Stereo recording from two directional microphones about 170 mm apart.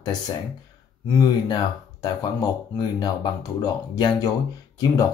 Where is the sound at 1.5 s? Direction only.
25° left (ahead or behind).